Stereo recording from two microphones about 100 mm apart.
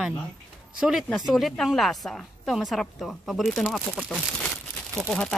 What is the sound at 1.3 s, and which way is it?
A woman's voice, centre (ahead or behind).